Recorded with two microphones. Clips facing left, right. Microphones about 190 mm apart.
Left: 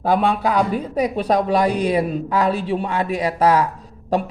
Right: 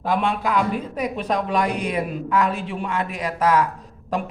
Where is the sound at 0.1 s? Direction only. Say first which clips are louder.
Left 4 dB; 35° left (ahead or behind).